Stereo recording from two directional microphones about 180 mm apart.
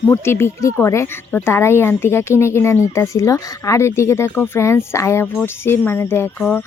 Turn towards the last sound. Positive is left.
turn(degrees=15)  # may be behind; listen again after turning